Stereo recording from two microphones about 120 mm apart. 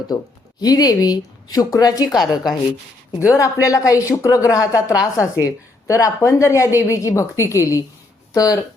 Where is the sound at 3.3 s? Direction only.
25° left (ahead or behind).